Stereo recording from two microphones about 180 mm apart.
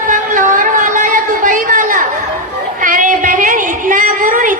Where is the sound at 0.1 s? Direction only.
50° right (ahead or behind).